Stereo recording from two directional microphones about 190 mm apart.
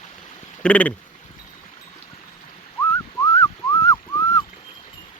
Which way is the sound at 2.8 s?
15° left (ahead or behind).